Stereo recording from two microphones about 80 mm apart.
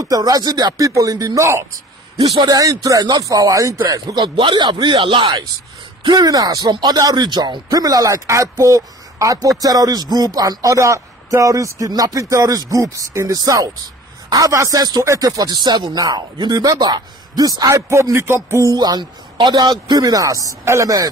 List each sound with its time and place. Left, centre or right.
0.0 s speech: right
2.3 s speech: right
6.0 s speech: right
13.4 s speech: right
15.5 s a man's voice: right
18.7 s speech: right